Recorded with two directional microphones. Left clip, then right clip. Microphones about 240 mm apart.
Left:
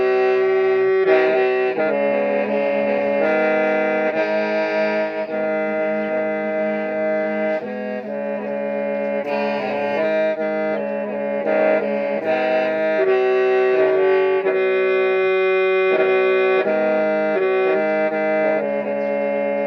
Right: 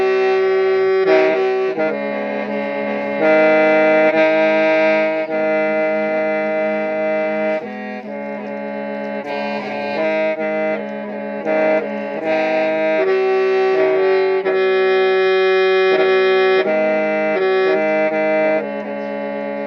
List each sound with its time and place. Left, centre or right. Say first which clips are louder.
0.7 s music: right 2 dB; right
3.2 s music: right 9 dB; right
10.0 s saxophone: right 2 dB; right
11.5 s music: right 2 dB; right
13.1 s music: right 1 dB; centre
13.7 s music: right 1 dB; right
16.6 s music: right 2 dB; right
17.4 s music: right 2 dB; right